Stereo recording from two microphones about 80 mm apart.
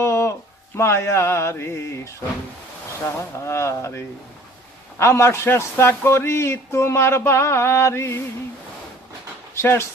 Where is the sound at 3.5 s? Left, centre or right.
Left.